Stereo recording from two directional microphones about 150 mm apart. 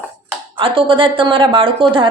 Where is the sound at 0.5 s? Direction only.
35° right (ahead or behind).